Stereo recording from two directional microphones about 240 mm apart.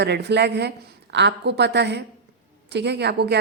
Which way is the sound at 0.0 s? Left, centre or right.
Right.